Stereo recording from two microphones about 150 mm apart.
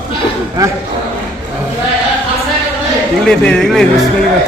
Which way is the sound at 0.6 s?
25° right (ahead or behind).